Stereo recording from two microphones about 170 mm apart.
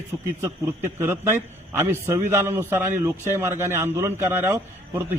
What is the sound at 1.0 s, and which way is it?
A man's voice, 15° right (ahead or behind).